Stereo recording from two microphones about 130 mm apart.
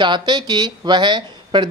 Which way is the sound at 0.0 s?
35° right (ahead or behind).